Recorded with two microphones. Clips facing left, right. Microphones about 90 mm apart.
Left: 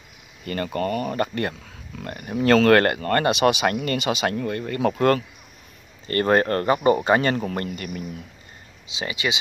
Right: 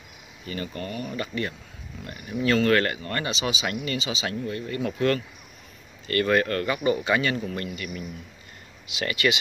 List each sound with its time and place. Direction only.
0.5 s speech: 55° left (ahead or behind)
6.0 s speech: 35° left (ahead or behind)
8.9 s speech: 20° left (ahead or behind)